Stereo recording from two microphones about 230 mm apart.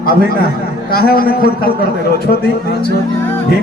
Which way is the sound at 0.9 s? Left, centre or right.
Left.